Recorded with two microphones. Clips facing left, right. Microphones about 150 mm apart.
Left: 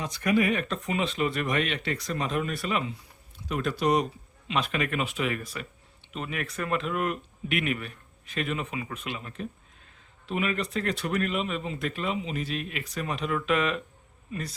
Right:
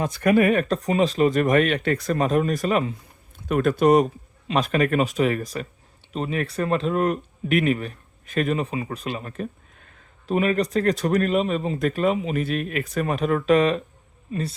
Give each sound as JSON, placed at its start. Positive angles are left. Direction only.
{"t": 0.0, "sound": "a man's voice", "side_deg": -50}